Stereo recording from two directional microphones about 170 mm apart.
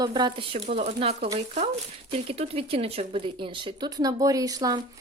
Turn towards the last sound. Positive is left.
turn(degrees=-20)  # may be behind; listen again after turning